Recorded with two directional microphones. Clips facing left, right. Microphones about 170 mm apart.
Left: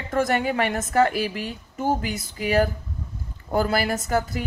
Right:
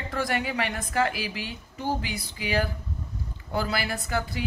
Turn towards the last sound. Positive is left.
turn(degrees=45)  # may be behind; listen again after turning